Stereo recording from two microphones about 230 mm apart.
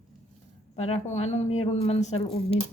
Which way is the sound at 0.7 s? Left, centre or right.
Left.